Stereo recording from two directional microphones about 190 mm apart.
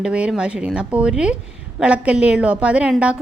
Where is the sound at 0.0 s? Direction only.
5° right (ahead or behind).